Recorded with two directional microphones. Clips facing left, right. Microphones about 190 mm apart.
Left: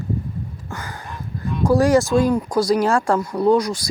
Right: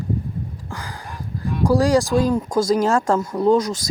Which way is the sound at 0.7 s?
15° right (ahead or behind).